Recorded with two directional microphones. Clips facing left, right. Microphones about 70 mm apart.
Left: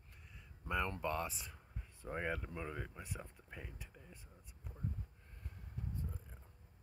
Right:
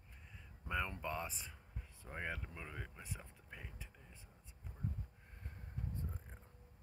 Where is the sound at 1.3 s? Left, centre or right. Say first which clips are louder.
Left 2 dB; centre.